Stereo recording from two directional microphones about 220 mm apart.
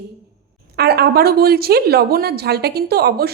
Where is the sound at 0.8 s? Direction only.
45° right (ahead or behind).